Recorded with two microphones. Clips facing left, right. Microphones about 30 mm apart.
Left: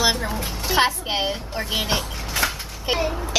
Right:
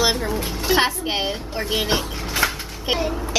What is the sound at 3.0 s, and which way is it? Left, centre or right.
Speech, centre.